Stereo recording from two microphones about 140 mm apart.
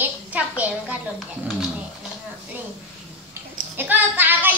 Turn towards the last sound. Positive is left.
turn(degrees=-15)  # may be behind; listen again after turning